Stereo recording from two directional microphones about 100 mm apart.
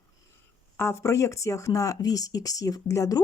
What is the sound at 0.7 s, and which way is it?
Speech, 25° left (ahead or behind).